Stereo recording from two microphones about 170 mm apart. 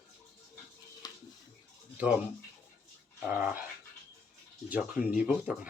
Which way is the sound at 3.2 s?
10° right (ahead or behind).